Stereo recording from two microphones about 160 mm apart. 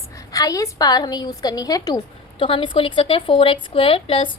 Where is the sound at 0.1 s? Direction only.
20° left (ahead or behind).